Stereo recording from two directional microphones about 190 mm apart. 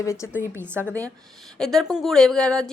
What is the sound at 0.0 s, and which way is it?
Speech, 15° left (ahead or behind).